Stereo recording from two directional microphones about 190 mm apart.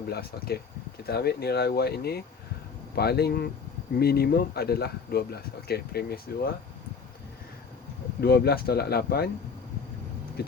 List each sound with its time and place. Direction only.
0.1 s speech: 55° left (ahead or behind)
8.2 s speech: 55° left (ahead or behind)